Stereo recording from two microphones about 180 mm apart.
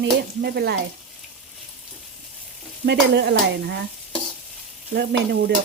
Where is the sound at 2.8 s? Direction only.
65° right (ahead or behind).